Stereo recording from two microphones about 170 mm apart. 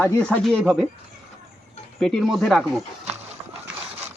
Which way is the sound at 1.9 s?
5° left (ahead or behind).